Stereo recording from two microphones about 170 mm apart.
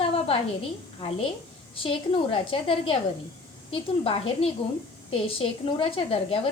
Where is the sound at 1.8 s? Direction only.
35° left (ahead or behind).